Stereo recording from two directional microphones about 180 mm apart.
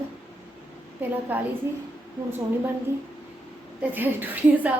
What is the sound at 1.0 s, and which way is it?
Speech, 10° right (ahead or behind).